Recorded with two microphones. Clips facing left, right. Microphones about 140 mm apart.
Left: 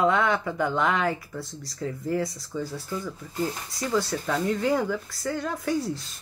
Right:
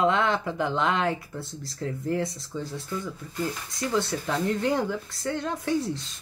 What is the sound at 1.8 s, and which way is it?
Speech, centre (ahead or behind).